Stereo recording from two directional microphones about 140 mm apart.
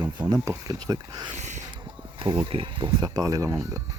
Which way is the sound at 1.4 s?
55° right (ahead or behind).